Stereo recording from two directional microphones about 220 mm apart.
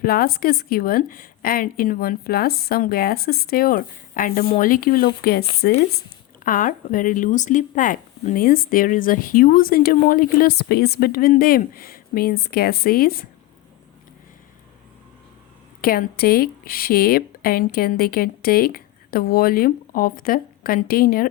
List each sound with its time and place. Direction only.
0.0 s speech: 45° left (ahead or behind)
15.8 s speech: 40° left (ahead or behind)